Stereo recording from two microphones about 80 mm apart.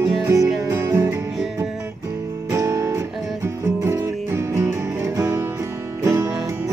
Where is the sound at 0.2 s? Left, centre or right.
Right.